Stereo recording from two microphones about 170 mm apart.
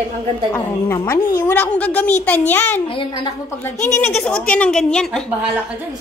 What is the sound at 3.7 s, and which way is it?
Speech, 45° left (ahead or behind).